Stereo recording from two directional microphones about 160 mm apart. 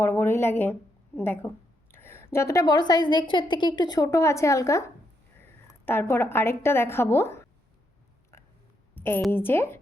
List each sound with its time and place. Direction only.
0.0 s a woman's voice: 15° left (ahead or behind)
9.0 s a sound: 10° left (ahead or behind)
9.3 s a woman's voice: 15° left (ahead or behind)